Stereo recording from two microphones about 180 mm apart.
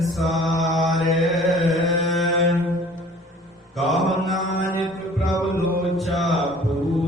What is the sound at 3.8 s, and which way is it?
Mantra, centre (ahead or behind).